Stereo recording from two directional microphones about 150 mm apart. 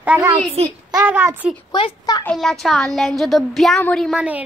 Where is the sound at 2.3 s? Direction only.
Centre (ahead or behind).